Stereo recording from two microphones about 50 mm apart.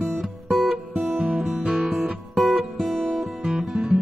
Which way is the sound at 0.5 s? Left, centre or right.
Centre.